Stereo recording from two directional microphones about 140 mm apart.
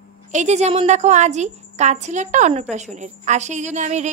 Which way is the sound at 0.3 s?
55° right (ahead or behind).